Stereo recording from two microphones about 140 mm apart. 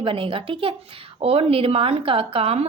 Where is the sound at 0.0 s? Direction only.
40° right (ahead or behind).